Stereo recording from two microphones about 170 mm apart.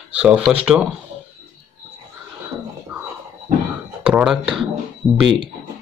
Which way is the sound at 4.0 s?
10° right (ahead or behind).